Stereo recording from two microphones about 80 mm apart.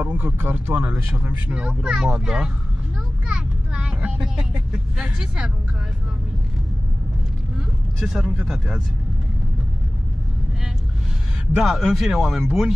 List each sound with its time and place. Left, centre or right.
0.0 s speech: centre
3.3 s a sound: centre
4.7 s speech: centre
8.0 s speech: centre
11.5 s speech: centre